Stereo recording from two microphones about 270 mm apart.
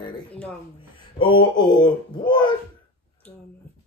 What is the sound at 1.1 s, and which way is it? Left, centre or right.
A man's voice, centre.